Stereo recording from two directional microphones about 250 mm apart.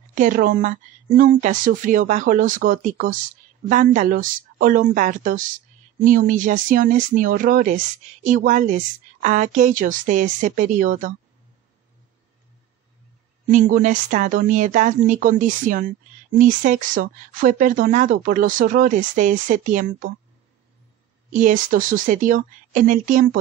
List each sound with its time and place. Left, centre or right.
0.1 s speech: right
13.5 s speech: right
21.3 s speech: right